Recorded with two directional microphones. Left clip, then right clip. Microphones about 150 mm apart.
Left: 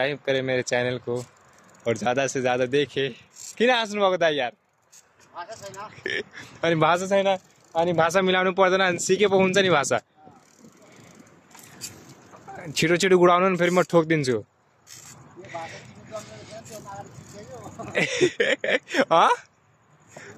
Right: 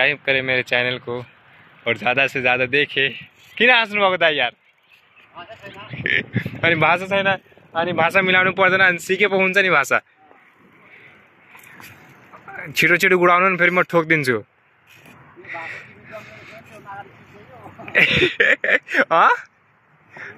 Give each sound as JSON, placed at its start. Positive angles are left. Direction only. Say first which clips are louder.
{"t": 0.0, "sound": "a man's voice", "louder": "right 6 dB", "side_deg": 15}
{"t": 9.8, "sound": "speech", "louder": "right 6 dB", "side_deg": 20}
{"t": 12.5, "sound": "speech", "louder": "right 7 dB", "side_deg": 25}
{"t": 14.0, "sound": "a man's voice", "louder": "right 6 dB", "side_deg": 10}
{"t": 15.4, "sound": "a sound", "louder": "right 5 dB", "side_deg": 30}
{"t": 17.8, "sound": "speech", "louder": "right 7 dB", "side_deg": 15}